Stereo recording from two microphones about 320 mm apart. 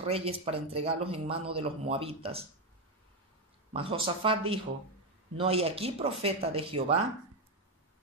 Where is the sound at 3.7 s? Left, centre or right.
Centre.